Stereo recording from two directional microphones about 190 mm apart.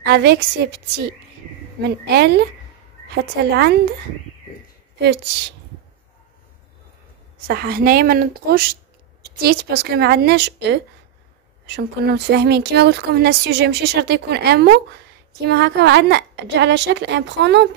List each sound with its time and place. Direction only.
0.0 s speech: 60° right (ahead or behind)
3.5 s speech: 55° right (ahead or behind)
7.4 s a woman's voice: 55° right (ahead or behind)